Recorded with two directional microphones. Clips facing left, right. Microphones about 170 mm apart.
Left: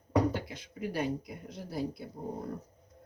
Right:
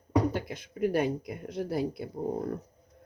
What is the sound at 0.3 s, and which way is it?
Speech, 50° right (ahead or behind).